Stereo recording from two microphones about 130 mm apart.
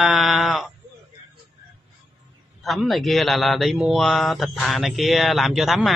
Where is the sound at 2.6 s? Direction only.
Centre (ahead or behind).